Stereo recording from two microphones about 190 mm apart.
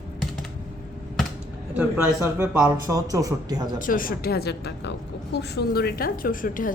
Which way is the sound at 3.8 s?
45° left (ahead or behind).